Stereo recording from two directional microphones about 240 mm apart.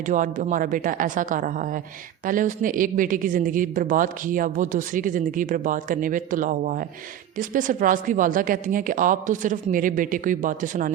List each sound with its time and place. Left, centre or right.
0.0 s a woman's voice: right